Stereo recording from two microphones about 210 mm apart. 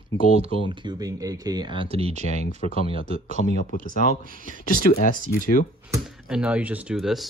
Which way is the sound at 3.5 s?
40° left (ahead or behind).